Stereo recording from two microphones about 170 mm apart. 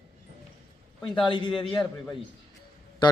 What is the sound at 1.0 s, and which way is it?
Speech, 30° left (ahead or behind).